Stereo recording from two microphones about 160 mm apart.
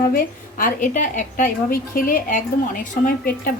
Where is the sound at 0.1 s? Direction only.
60° left (ahead or behind).